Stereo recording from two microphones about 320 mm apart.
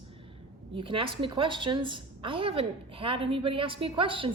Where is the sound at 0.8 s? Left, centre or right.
Centre.